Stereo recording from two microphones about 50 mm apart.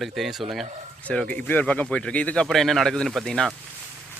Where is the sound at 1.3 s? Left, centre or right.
Left.